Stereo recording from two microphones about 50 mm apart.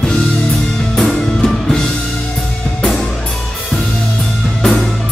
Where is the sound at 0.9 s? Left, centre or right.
Centre.